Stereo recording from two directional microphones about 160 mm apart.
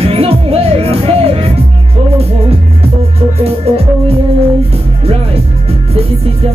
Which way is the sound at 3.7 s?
40° right (ahead or behind).